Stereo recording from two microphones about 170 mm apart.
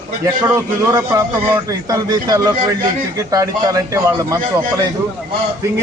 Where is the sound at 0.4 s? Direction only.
20° right (ahead or behind).